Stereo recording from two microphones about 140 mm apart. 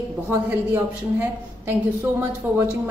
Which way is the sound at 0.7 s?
15° right (ahead or behind).